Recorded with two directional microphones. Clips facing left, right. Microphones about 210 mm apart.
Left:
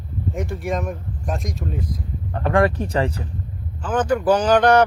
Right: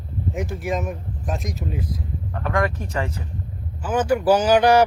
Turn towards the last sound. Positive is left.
turn(degrees=-10)  # may be behind; listen again after turning